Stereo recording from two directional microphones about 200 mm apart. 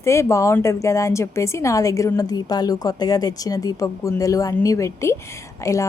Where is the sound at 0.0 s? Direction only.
15° left (ahead or behind).